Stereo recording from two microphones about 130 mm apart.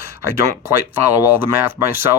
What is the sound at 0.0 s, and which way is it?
Speech, 20° right (ahead or behind).